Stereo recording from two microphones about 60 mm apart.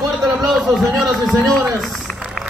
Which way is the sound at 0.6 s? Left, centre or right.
Centre.